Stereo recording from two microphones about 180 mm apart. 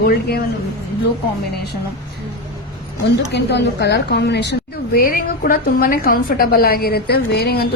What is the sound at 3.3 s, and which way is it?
A woman's voice, 70° left (ahead or behind).